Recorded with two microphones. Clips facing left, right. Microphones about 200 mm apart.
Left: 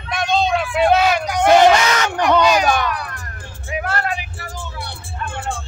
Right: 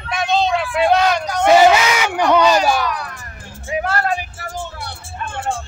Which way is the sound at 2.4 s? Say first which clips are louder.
Right 1 dB; 10° left (ahead or behind).